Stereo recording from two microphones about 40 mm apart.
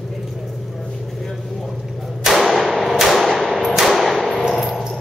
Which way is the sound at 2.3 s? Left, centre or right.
Centre.